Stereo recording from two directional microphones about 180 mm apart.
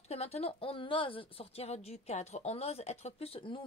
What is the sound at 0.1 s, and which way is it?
A woman's voice, 35° left (ahead or behind).